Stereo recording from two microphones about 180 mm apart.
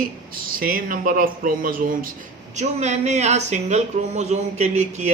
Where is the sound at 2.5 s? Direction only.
40° right (ahead or behind).